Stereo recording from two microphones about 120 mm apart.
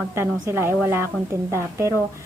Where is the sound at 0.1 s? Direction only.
20° right (ahead or behind).